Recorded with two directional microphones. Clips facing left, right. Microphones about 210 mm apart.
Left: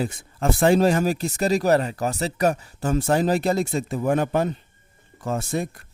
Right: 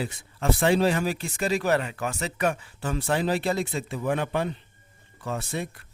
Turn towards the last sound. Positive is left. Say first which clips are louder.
# left 5 dB
turn(degrees=45)  # may be behind; listen again after turning